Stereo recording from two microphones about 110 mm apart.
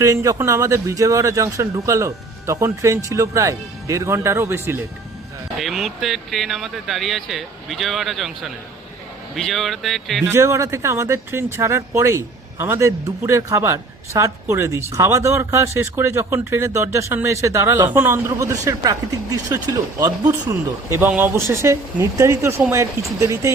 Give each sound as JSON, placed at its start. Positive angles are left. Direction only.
{"t": 0.0, "sound": "speech", "side_deg": -30}
{"t": 5.5, "sound": "speech", "side_deg": 0}
{"t": 9.3, "sound": "speech", "side_deg": 0}
{"t": 10.2, "sound": "speech", "side_deg": -25}
{"t": 20.5, "sound": "speech", "side_deg": -25}